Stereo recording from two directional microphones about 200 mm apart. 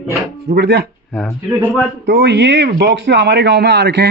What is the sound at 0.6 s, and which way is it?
Speech, 55° right (ahead or behind).